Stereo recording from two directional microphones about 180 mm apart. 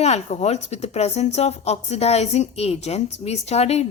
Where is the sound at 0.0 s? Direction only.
40° left (ahead or behind).